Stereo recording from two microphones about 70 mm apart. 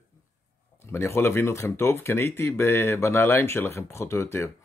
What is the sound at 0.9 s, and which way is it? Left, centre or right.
Speech, left.